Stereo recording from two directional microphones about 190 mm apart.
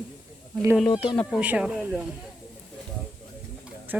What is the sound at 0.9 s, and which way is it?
Speech, 25° left (ahead or behind).